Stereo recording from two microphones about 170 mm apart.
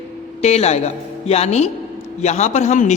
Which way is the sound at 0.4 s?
40° left (ahead or behind).